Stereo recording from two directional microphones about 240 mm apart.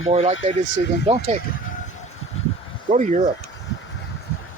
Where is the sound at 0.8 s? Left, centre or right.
Left.